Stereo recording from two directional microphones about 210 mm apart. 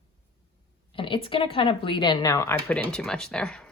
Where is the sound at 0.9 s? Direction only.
25° left (ahead or behind); by 3.7 s 5° left (ahead or behind).